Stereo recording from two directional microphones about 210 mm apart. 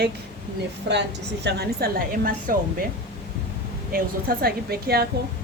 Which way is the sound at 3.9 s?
45° right (ahead or behind).